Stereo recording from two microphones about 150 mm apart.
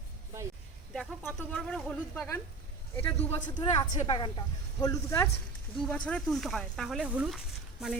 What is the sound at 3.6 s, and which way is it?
A woman's voice, 25° left (ahead or behind).